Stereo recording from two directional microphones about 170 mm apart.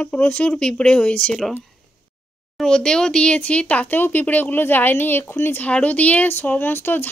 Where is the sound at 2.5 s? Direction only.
5° left (ahead or behind).